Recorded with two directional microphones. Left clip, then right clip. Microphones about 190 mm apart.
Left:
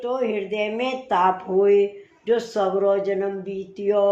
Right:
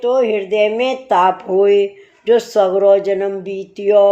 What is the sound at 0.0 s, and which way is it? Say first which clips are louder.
Speech: right 9 dB; 35° right (ahead or behind).